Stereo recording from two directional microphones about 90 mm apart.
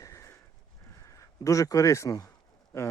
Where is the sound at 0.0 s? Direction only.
35° left (ahead or behind).